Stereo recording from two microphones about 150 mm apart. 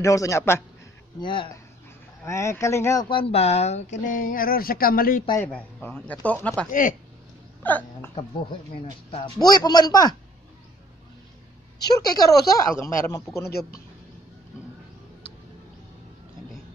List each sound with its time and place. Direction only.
0.0 s speech: 20° left (ahead or behind)
1.2 s speech: 35° left (ahead or behind)
2.2 s speech: 20° left (ahead or behind)
3.1 s speech: 40° left (ahead or behind); by 5.2 s 75° left (ahead or behind)
5.4 s speech: 10° left (ahead or behind)
6.7 s speech: 60° left (ahead or behind)
7.6 s hiccup: 10° left (ahead or behind)
8.1 s speech: 40° left (ahead or behind)
12.3 s speech: 20° left (ahead or behind)
13.5 s speech: 90° left